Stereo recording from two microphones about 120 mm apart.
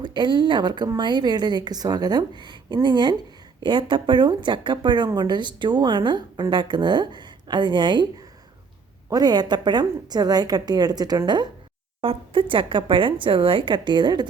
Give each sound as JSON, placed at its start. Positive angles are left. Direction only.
{"t": 0.0, "sound": "speech", "side_deg": -40}
{"t": 9.0, "sound": "speech", "side_deg": -35}
{"t": 12.0, "sound": "speech", "side_deg": -45}